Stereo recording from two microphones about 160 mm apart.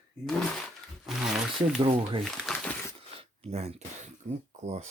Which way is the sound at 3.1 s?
40° right (ahead or behind).